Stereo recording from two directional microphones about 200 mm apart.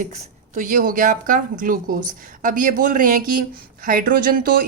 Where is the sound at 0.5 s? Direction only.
40° right (ahead or behind).